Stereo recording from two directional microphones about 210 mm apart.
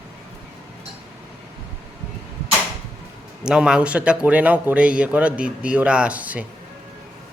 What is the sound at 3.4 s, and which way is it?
A man's voice, 5° right (ahead or behind).